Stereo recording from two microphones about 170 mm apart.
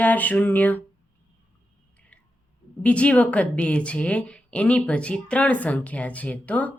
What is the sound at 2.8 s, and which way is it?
Speech, 5° left (ahead or behind).